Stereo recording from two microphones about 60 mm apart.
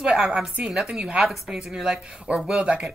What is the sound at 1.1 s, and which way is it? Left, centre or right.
A woman's voice, centre.